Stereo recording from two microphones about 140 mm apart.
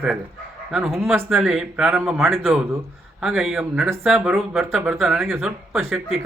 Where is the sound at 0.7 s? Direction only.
Centre (ahead or behind).